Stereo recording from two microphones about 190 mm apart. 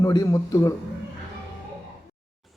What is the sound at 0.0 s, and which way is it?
Speech, 15° left (ahead or behind).